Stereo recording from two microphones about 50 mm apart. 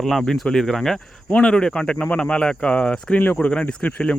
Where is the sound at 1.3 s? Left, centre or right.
Left.